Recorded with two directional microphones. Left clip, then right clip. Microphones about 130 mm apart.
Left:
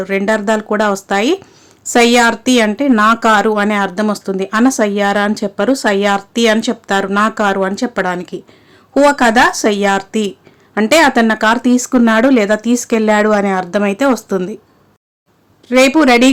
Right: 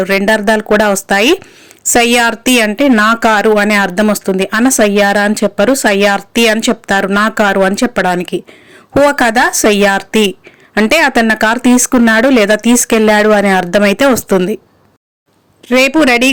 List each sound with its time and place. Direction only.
0.0 s speech: 25° right (ahead or behind)
15.6 s speech: 20° right (ahead or behind)